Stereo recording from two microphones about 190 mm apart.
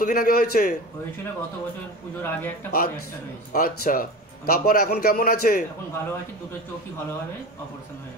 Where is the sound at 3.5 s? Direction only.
50° left (ahead or behind).